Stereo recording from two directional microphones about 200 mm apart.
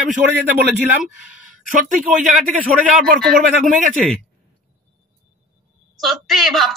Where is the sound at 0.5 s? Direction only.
10° right (ahead or behind).